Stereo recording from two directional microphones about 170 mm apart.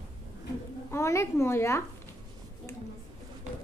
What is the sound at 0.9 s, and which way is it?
Speech, 15° left (ahead or behind).